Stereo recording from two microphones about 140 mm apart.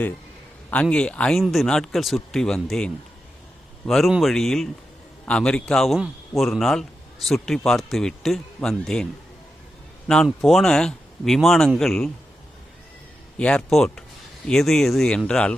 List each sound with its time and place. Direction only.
0.7 s a man's voice: 5° left (ahead or behind)
10.2 s a man's voice: centre (ahead or behind)
13.4 s a man's voice: 5° left (ahead or behind)